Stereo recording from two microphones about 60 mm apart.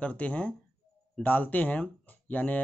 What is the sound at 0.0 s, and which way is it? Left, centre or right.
Speech, left.